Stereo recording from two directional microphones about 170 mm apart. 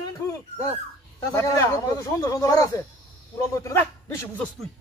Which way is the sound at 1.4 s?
15° left (ahead or behind).